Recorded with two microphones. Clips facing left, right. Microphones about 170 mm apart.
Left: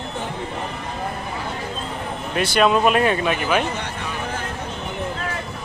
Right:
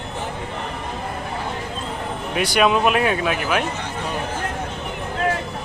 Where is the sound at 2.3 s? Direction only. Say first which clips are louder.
Left 1 dB; 10° right (ahead or behind).